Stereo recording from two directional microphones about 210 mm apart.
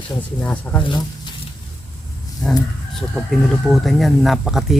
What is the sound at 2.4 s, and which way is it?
Speech, 5° left (ahead or behind).